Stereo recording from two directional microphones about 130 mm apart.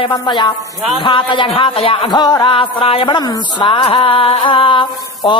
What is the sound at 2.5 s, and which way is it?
Music, 45° left (ahead or behind).